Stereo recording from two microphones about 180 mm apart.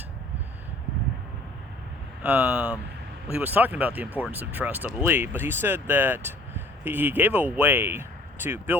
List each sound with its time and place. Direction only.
2.2 s speech: 10° right (ahead or behind)